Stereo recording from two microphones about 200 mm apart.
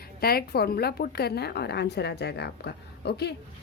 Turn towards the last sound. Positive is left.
turn(degrees=55)  # may be behind; listen again after turning